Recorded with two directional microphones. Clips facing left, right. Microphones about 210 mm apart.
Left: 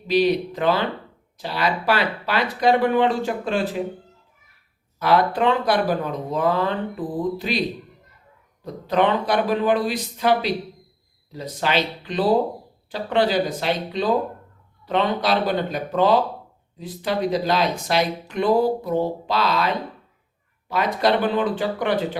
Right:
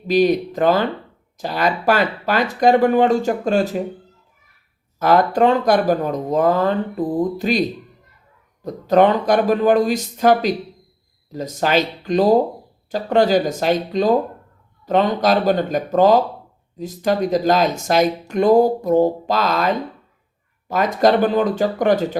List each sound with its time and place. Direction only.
0.1 s speech: 45° right (ahead or behind)
4.9 s speech: 45° right (ahead or behind)
8.6 s speech: 45° right (ahead or behind)